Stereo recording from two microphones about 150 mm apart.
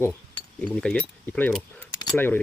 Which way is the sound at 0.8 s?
5° left (ahead or behind).